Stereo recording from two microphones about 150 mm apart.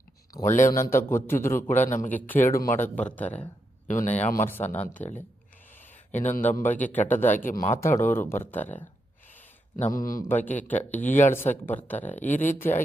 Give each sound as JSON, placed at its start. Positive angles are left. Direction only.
{"t": 0.5, "sound": "a man's voice", "side_deg": 60}
{"t": 0.8, "sound": "speech", "side_deg": 20}
{"t": 3.8, "sound": "a man's voice", "side_deg": 55}
{"t": 4.7, "sound": "speech", "side_deg": 10}
{"t": 6.1, "sound": "speech", "side_deg": 10}
{"t": 9.7, "sound": "a man's voice", "side_deg": 60}
{"t": 10.2, "sound": "speech", "side_deg": 10}